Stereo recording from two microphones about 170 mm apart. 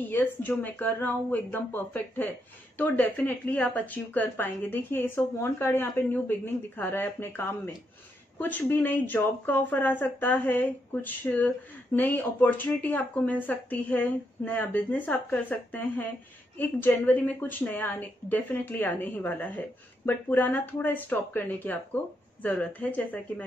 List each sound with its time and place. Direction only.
0.0 s speech: 10° left (ahead or behind)